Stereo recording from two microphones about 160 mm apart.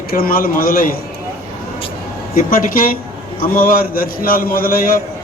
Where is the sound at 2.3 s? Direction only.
65° left (ahead or behind).